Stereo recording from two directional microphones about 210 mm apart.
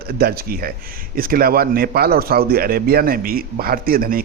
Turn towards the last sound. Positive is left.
turn(degrees=-45)  # may be behind; listen again after turning